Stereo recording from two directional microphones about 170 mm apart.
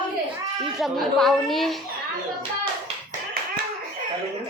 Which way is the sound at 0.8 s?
Centre (ahead or behind).